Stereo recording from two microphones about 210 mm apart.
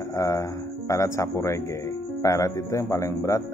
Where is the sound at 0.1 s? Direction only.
15° left (ahead or behind).